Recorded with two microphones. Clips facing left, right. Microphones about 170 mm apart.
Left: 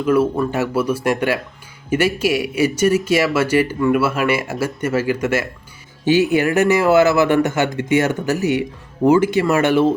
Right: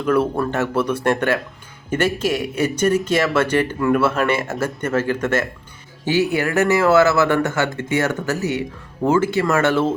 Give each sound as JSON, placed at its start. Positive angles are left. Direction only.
{"t": 0.0, "sound": "speech", "side_deg": 5}